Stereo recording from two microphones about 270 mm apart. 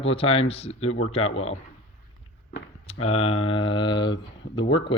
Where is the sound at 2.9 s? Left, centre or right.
Left.